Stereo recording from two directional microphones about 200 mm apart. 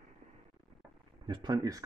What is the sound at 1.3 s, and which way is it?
Speech, 20° right (ahead or behind).